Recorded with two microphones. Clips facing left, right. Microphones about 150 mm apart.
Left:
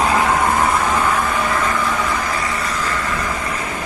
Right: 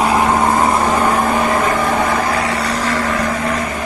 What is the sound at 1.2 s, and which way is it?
Vehicle, 45° right (ahead or behind).